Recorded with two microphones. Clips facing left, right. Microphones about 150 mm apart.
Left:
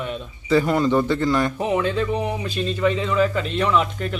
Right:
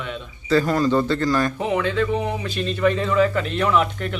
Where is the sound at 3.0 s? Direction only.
Centre (ahead or behind).